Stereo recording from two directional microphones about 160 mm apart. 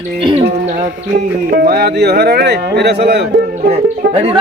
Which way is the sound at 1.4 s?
75° right (ahead or behind).